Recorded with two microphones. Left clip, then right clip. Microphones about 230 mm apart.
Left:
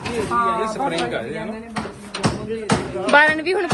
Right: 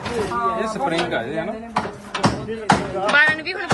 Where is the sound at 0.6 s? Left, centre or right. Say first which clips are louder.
Even; right.